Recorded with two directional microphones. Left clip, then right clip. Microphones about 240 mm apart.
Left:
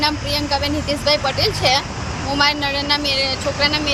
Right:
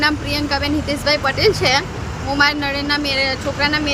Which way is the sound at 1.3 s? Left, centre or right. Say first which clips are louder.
Right 4 dB; right.